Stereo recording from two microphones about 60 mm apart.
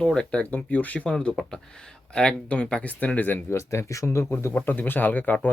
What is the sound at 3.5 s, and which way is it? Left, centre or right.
Speech, left.